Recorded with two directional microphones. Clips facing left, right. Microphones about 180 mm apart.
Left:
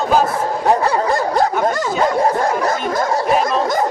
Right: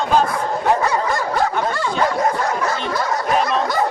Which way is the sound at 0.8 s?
35° left (ahead or behind).